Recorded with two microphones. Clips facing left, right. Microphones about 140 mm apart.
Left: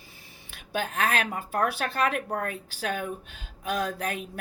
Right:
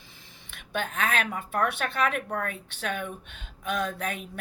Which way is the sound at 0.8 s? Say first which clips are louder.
Left 1 dB; 40° left (ahead or behind).